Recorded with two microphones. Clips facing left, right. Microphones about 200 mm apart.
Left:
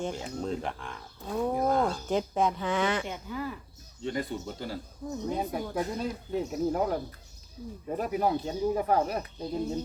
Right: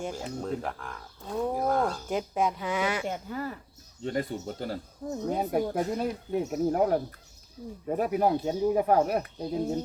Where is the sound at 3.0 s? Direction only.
45° right (ahead or behind).